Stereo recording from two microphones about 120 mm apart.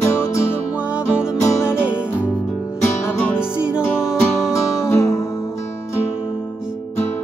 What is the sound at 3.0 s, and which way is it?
Music, 20° left (ahead or behind).